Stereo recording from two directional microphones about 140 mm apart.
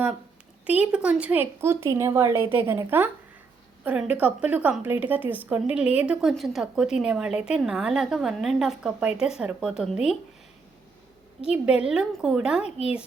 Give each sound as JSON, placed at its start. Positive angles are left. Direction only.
{"t": 0.7, "sound": "a woman's voice", "side_deg": -10}
{"t": 11.4, "sound": "a woman's voice", "side_deg": -10}